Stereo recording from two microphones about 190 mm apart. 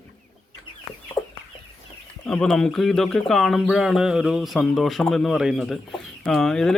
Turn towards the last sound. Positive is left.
turn(degrees=0)  # may be behind; listen again after turning